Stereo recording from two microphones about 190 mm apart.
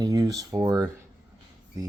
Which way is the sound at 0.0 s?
20° right (ahead or behind).